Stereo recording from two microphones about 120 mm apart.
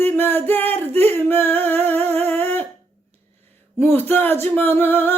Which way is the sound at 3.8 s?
15° left (ahead or behind).